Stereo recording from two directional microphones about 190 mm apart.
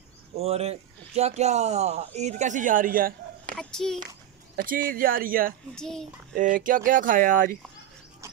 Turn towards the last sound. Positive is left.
turn(degrees=-45)  # may be behind; listen again after turning